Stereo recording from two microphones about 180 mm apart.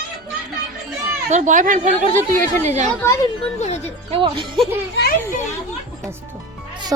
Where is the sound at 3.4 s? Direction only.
40° left (ahead or behind).